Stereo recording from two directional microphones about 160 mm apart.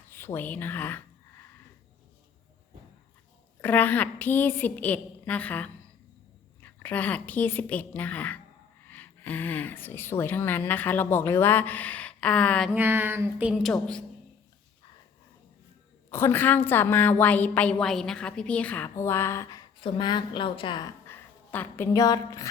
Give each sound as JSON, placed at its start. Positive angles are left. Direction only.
{"t": 0.1, "sound": "a woman's voice", "side_deg": 15}
{"t": 3.6, "sound": "speech", "side_deg": 10}
{"t": 12.7, "sound": "speech", "side_deg": -15}
{"t": 13.5, "sound": "a woman's voice", "side_deg": 0}
{"t": 16.0, "sound": "a woman's voice", "side_deg": 15}
{"t": 21.1, "sound": "a sound", "side_deg": 10}
{"t": 21.9, "sound": "a woman's voice", "side_deg": 25}